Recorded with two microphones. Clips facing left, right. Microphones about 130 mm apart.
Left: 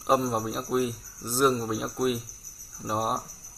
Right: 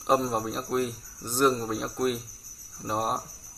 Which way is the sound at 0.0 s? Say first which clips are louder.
Even; centre (ahead or behind).